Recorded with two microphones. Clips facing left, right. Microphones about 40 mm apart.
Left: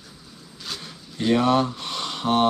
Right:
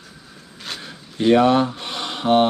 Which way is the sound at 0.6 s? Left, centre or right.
Right.